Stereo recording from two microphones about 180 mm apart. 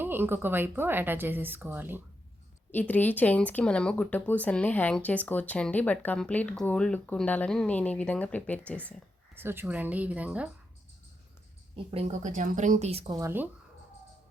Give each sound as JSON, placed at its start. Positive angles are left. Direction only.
{"t": 0.0, "sound": "a woman's voice", "side_deg": -10}
{"t": 2.7, "sound": "speech", "side_deg": 10}
{"t": 9.3, "sound": "a woman's voice", "side_deg": -10}
{"t": 11.9, "sound": "speech", "side_deg": -35}
{"t": 13.1, "sound": "a woman's voice", "side_deg": -15}